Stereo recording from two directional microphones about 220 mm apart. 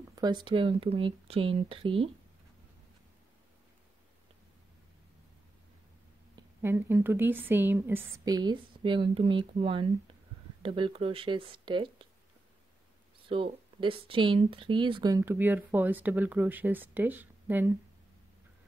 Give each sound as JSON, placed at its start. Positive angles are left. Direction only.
{"t": 0.1, "sound": "speech", "side_deg": -20}
{"t": 6.3, "sound": "speech", "side_deg": -10}
{"t": 13.3, "sound": "speech", "side_deg": -25}